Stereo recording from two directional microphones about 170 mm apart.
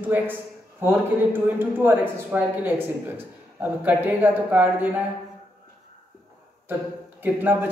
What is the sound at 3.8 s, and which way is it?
Speech, 10° right (ahead or behind).